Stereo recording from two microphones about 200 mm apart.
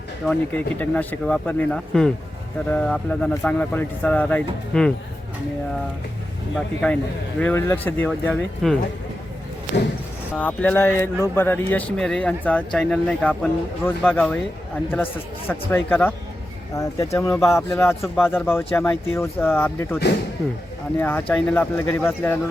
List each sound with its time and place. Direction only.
0.3 s speech: 5° left (ahead or behind)
6.8 s speech: 5° left (ahead or behind)
10.3 s speech: 5° left (ahead or behind)
21.0 s speech: 10° left (ahead or behind)